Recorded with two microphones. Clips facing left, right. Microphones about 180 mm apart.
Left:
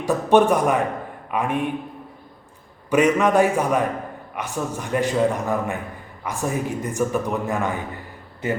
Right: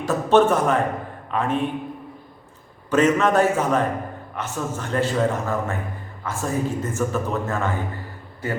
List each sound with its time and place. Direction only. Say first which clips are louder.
0.0 s speech: even; 15° left (ahead or behind)
2.9 s a man's voice: left 1 dB; 15° left (ahead or behind)